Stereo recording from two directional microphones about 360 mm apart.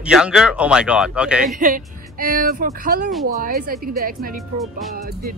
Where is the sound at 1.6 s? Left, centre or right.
Right.